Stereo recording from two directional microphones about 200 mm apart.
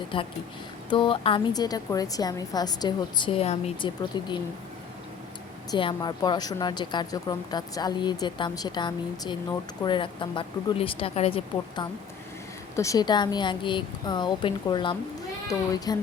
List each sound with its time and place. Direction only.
0.1 s speech: 25° left (ahead or behind)
5.7 s speech: 20° left (ahead or behind)
12.7 s speech: 15° left (ahead or behind)